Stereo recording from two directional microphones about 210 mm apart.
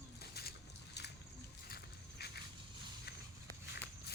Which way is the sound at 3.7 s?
50° left (ahead or behind).